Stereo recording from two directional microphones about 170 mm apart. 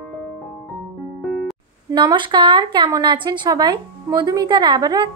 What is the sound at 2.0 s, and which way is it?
A woman's voice, 25° right (ahead or behind).